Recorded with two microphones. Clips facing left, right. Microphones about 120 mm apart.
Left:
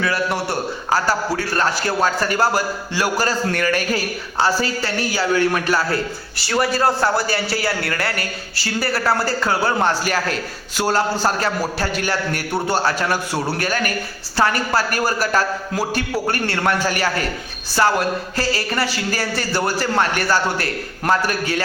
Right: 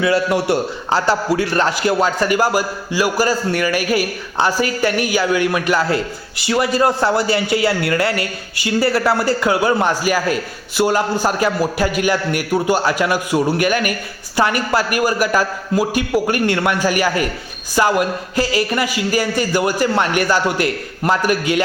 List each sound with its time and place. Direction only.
0.5 s a man's voice: 20° right (ahead or behind)